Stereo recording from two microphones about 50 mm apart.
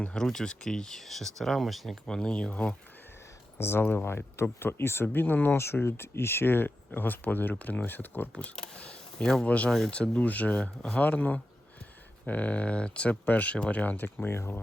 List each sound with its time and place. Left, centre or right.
0.2 s speech: centre
2.0 s speech: centre
2.5 s speech: left
3.6 s speech: left
5.5 s speech: left
8.5 s speech: centre; by 10.6 s left
10.6 s speech: left
11.0 s speech: left
14.3 s speech: left